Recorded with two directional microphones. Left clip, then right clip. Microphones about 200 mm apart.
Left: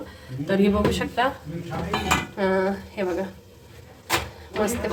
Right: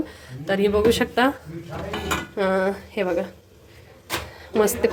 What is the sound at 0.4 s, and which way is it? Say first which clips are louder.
Speech: right 3 dB; 50° right (ahead or behind).